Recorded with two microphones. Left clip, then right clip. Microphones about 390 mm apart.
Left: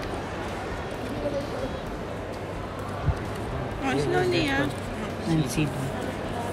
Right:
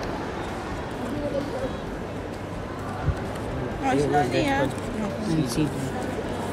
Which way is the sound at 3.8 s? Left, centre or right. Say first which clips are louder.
Right 3 dB; centre.